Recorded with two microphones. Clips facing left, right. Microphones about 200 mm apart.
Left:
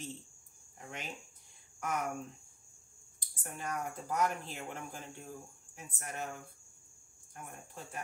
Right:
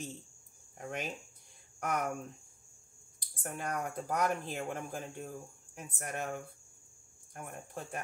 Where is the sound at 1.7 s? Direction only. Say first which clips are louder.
Right 2 dB; 55° right (ahead or behind).